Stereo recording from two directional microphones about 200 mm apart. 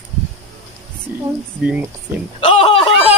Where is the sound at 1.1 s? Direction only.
10° right (ahead or behind).